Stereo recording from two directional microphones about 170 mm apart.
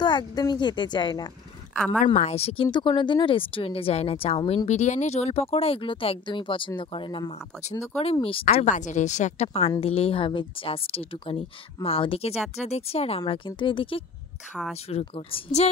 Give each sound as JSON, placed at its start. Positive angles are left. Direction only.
{"t": 0.0, "sound": "speech", "side_deg": 25}
{"t": 2.1, "sound": "speech", "side_deg": 40}
{"t": 8.6, "sound": "a woman's voice", "side_deg": 45}
{"t": 13.2, "sound": "speech", "side_deg": 25}